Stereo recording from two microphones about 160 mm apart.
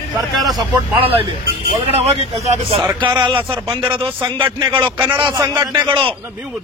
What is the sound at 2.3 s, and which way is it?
Speech, 40° right (ahead or behind).